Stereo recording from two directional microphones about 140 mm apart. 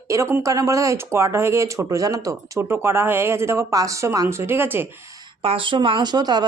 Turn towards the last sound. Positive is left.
turn(degrees=-30)  # may be behind; listen again after turning